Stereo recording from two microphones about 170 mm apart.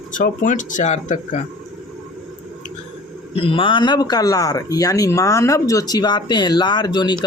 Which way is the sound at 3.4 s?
30° left (ahead or behind).